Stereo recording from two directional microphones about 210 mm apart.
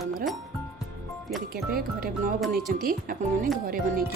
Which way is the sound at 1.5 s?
45° right (ahead or behind).